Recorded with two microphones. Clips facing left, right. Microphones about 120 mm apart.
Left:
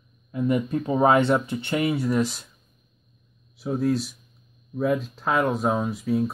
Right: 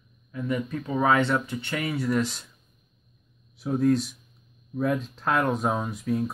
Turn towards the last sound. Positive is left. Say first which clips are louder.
# left 3 dB
turn(degrees=5)  # may be behind; listen again after turning